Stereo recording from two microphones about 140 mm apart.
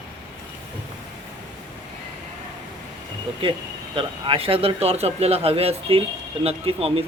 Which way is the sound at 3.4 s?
40° right (ahead or behind).